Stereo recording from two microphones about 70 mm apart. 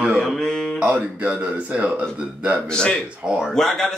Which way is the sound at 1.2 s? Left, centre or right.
Centre.